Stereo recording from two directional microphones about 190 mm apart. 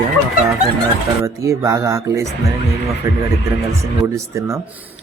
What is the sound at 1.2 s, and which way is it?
Speech, 15° right (ahead or behind).